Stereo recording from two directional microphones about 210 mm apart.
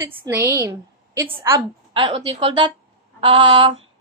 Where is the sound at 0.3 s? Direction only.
10° right (ahead or behind).